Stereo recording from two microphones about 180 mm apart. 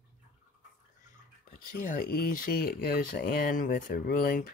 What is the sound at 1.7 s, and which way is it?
Speech, 50° left (ahead or behind).